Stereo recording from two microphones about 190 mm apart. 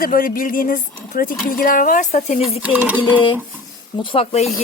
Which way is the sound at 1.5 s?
45° left (ahead or behind).